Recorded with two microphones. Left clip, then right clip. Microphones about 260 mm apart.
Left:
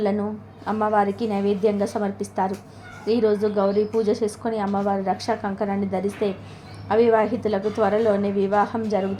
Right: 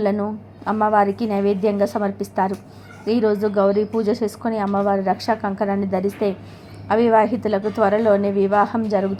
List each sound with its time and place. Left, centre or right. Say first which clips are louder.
0.0 s a woman's voice: right 3 dB; centre